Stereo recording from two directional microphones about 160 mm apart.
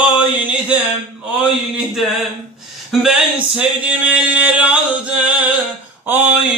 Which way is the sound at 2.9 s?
Centre (ahead or behind).